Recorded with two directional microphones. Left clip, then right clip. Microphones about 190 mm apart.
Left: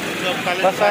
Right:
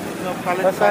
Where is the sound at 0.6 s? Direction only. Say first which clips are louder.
Left 1 dB; 10° right (ahead or behind).